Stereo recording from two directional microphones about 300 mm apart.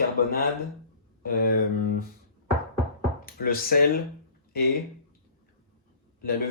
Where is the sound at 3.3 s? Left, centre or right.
Left.